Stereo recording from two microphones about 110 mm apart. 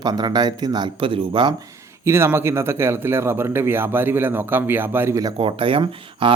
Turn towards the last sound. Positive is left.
turn(degrees=-50)  # may be behind; listen again after turning